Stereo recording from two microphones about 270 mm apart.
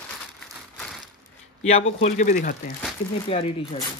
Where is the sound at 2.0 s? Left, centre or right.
Left.